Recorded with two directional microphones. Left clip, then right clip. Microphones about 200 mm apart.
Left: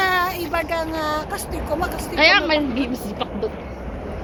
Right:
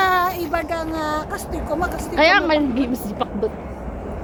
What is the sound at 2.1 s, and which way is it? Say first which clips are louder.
A woman's voice: even; 40° right (ahead or behind).